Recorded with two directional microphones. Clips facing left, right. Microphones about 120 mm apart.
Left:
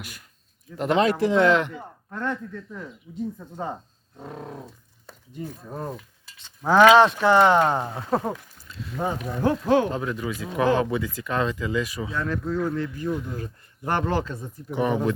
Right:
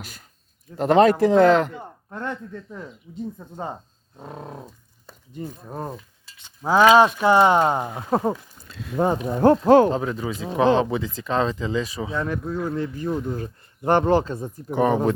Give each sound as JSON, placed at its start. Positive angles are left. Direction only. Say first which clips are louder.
{"t": 0.0, "sound": "speech", "louder": "right 1 dB", "side_deg": -30}
{"t": 3.3, "sound": "a sound", "louder": "even", "side_deg": -15}
{"t": 6.3, "sound": "a sound", "louder": "left 1 dB", "side_deg": -10}
{"t": 9.1, "sound": "speech", "louder": "right 6 dB", "side_deg": -30}
{"t": 9.6, "sound": "speech", "louder": "right 6 dB", "side_deg": -40}
{"t": 9.9, "sound": "speech", "louder": "right 3 dB", "side_deg": -30}